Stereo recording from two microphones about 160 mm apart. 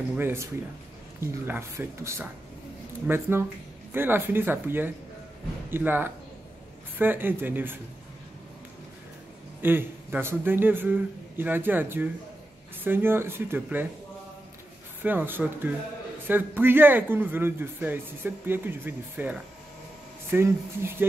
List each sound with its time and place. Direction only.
0.1 s a man's voice: 15° right (ahead or behind)
9.6 s a man's voice: 15° right (ahead or behind)
15.0 s a man's voice: 10° right (ahead or behind)